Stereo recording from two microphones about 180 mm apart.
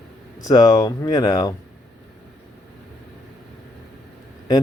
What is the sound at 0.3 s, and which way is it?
Speech, 20° left (ahead or behind).